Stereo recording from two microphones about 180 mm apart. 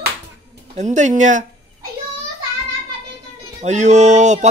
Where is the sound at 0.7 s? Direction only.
40° right (ahead or behind).